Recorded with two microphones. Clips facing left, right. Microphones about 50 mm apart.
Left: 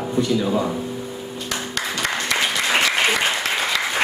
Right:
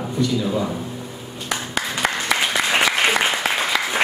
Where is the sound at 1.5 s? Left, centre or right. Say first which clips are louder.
Right 2 dB; centre.